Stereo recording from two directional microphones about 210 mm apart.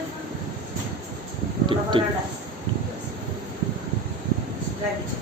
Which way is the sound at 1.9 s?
25° right (ahead or behind).